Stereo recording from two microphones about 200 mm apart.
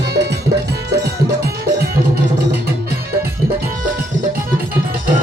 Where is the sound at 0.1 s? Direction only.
55° right (ahead or behind).